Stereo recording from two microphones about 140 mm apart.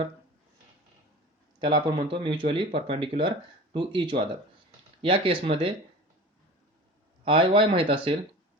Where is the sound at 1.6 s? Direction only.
35° right (ahead or behind).